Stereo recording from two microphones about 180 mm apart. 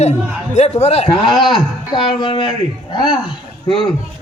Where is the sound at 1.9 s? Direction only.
25° left (ahead or behind).